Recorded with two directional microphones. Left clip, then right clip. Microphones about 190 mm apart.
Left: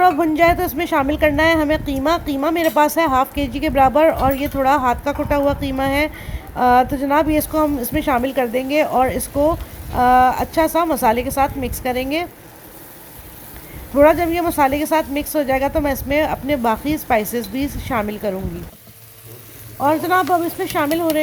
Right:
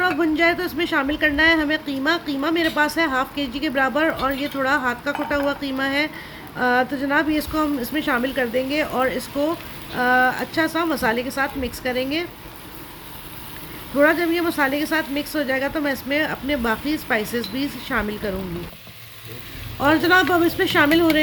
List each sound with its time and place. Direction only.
0.0 s a woman's voice: 25° left (ahead or behind)
14.0 s a woman's voice: 20° left (ahead or behind)
19.8 s a woman's voice: 25° left (ahead or behind)